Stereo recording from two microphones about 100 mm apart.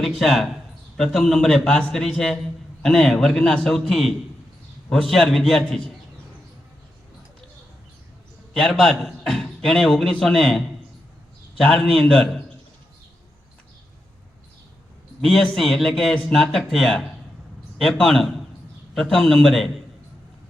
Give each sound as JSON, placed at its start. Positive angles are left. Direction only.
{"t": 0.0, "sound": "a man's voice", "side_deg": 5}
{"t": 8.5, "sound": "a man's voice", "side_deg": 10}
{"t": 11.6, "sound": "a man's voice", "side_deg": 10}
{"t": 15.2, "sound": "a man's voice", "side_deg": 5}